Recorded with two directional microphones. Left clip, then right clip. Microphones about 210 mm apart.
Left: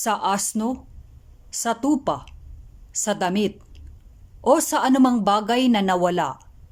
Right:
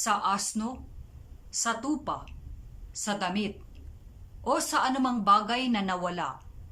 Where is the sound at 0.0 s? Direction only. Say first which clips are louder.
Left 5 dB; 35° left (ahead or behind).